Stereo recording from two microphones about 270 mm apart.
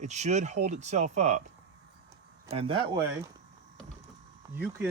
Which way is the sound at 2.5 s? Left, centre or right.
Centre.